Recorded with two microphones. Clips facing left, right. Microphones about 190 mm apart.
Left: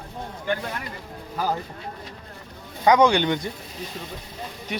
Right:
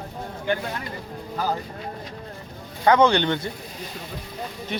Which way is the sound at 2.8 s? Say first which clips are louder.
Even; 10° left (ahead or behind).